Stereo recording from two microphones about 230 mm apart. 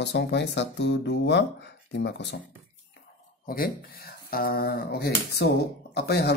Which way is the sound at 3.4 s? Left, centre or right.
Left.